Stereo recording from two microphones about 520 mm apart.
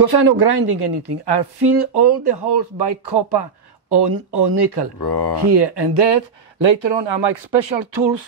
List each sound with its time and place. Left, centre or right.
0.0 s speech: right
5.0 s speech: left
5.4 s speech: right